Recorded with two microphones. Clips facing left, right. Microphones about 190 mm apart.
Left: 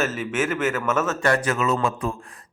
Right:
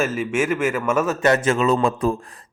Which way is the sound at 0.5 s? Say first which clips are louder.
Right 3 dB; 10° right (ahead or behind).